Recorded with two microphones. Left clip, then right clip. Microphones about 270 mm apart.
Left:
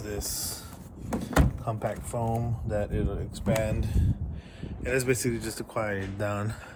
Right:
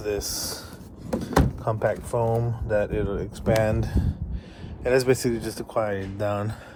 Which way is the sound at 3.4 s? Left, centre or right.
Right.